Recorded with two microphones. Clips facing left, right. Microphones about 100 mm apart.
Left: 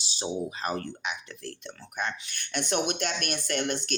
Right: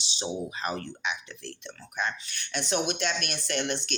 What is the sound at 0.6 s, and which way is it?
Speech, 40° left (ahead or behind).